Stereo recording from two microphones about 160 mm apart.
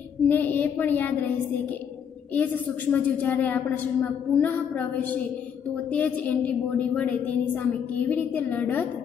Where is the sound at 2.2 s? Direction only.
10° left (ahead or behind).